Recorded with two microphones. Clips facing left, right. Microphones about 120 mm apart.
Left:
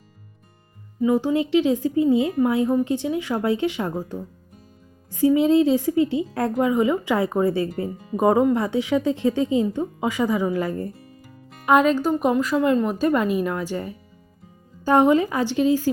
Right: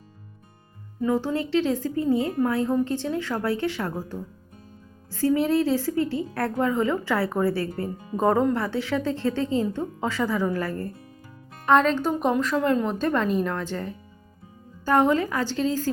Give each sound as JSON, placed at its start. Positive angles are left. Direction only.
{"t": 1.0, "sound": "speech", "side_deg": 15}